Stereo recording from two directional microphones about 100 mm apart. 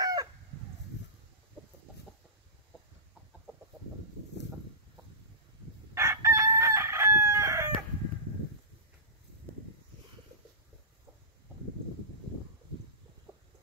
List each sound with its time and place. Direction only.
0.0 s chicken: 40° right (ahead or behind)
5.9 s chicken: 25° right (ahead or behind)